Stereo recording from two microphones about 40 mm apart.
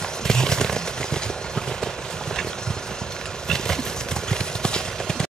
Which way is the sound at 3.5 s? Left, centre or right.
Centre.